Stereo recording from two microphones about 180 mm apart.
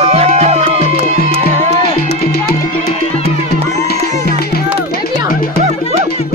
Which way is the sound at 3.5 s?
60° left (ahead or behind).